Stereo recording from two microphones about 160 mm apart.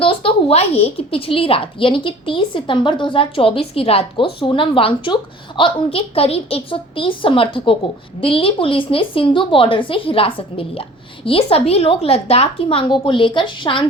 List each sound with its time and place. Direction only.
0.0 s a woman's voice: 35° left (ahead or behind)